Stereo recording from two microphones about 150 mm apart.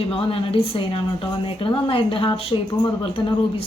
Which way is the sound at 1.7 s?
35° left (ahead or behind).